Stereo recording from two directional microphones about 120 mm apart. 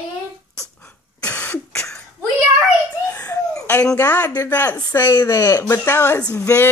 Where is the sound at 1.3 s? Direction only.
20° left (ahead or behind).